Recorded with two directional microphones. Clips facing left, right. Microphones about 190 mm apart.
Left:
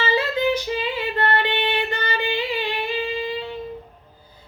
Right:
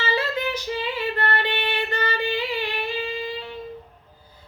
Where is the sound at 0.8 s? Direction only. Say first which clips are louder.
Left 2 dB; 20° left (ahead or behind).